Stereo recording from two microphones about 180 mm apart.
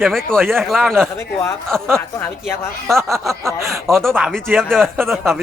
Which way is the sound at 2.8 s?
Centre (ahead or behind).